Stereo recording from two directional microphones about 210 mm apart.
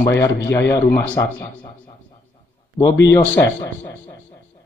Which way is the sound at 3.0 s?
15° left (ahead or behind).